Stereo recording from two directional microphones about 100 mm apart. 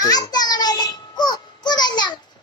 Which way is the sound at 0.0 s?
40° left (ahead or behind).